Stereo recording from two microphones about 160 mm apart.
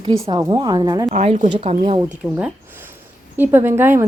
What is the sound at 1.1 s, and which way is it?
Speech, 50° right (ahead or behind).